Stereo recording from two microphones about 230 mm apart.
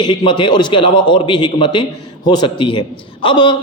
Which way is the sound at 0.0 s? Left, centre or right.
Centre.